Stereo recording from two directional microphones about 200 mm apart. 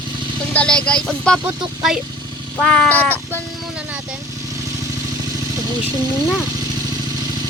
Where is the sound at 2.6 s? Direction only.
5° left (ahead or behind).